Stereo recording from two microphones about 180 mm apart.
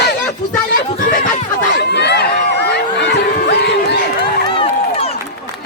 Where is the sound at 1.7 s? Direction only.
70° left (ahead or behind).